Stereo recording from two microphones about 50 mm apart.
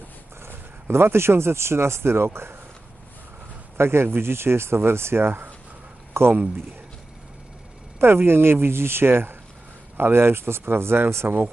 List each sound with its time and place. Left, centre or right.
0.4 s speech: right
3.8 s speech: right
7.9 s speech: right